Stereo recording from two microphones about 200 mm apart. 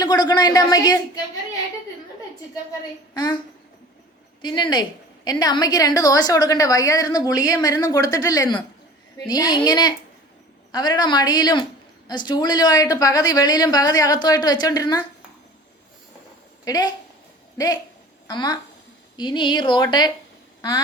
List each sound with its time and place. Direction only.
0.0 s a woman's voice: 20° left (ahead or behind)
3.2 s a woman's voice: 20° left (ahead or behind)
4.4 s a woman's voice: 20° left (ahead or behind)
16.6 s a woman's voice: 20° left (ahead or behind)
18.3 s a woman's voice: 20° left (ahead or behind)
20.6 s a sound: 20° left (ahead or behind)